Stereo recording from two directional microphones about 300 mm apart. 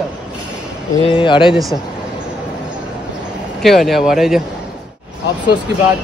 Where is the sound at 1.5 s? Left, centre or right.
Centre.